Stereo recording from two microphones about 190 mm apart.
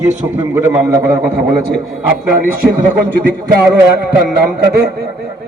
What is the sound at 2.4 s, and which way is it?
Speech, 50° right (ahead or behind).